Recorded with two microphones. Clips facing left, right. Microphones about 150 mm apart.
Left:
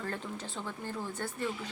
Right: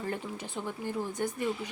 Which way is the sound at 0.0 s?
15° right (ahead or behind).